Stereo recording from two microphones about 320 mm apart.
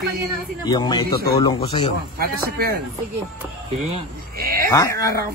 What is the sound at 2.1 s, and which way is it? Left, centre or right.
Speech, right.